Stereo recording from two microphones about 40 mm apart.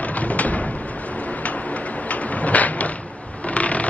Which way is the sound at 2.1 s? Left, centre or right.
Left.